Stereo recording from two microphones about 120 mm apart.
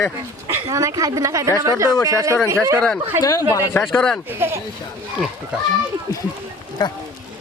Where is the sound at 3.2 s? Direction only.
30° left (ahead or behind).